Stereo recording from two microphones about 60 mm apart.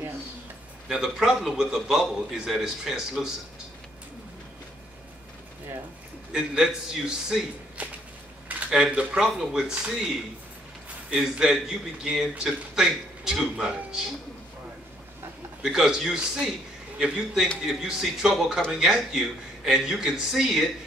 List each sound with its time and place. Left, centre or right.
0.8 s a man's voice: centre
6.3 s a man's voice: centre
7.8 s a sound: right
8.6 s a man's voice: centre
15.6 s a man's voice: centre
17.6 s a man's voice: centre